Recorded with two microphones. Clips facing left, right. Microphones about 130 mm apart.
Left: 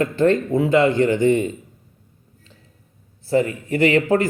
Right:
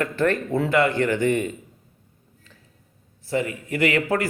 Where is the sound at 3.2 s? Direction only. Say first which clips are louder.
Left 6 dB; 35° left (ahead or behind).